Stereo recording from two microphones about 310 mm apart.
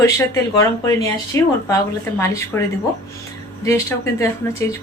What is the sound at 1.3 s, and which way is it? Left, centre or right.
Speech, centre.